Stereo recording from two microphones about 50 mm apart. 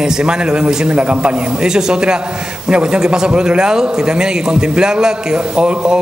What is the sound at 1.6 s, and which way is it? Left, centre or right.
A man's voice, centre.